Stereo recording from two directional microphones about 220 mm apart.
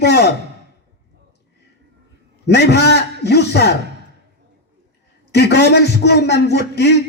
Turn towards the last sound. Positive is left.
turn(degrees=50)  # may be behind; listen again after turning